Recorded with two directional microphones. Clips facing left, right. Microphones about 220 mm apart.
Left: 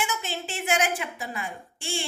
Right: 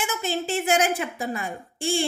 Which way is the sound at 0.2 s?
40° right (ahead or behind).